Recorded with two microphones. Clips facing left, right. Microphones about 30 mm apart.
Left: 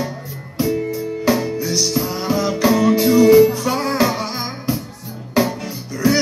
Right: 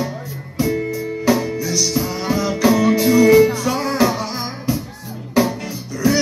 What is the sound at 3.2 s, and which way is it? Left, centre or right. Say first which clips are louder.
Music: left 1 dB; centre.